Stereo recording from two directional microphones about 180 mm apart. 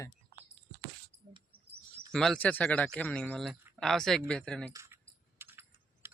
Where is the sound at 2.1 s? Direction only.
5° left (ahead or behind).